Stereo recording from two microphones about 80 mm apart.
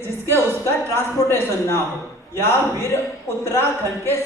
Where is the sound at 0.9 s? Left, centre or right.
Left.